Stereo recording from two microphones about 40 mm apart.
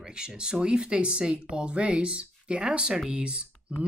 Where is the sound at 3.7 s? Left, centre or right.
Centre.